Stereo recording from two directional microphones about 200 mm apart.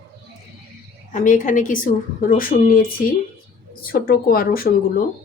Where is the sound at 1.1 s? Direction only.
40° left (ahead or behind).